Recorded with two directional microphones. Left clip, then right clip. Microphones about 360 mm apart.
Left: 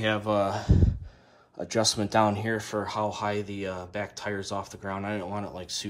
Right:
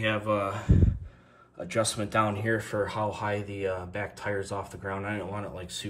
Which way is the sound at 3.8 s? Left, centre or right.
Centre.